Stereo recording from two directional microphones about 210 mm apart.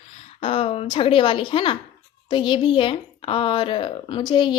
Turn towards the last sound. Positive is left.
turn(degrees=20)  # may be behind; listen again after turning